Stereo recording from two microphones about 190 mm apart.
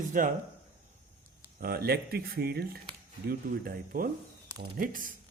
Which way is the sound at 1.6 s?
55° right (ahead or behind).